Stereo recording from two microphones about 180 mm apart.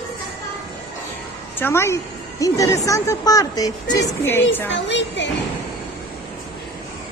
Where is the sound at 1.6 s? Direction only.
15° left (ahead or behind).